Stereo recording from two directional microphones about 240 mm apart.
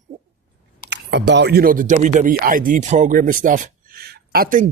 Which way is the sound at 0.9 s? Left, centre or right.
Right.